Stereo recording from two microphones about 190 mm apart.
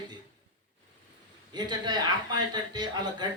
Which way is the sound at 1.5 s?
20° right (ahead or behind).